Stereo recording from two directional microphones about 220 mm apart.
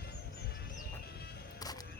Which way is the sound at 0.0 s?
45° left (ahead or behind).